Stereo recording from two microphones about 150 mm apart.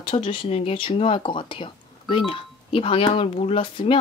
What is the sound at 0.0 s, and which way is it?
Speech, 35° left (ahead or behind).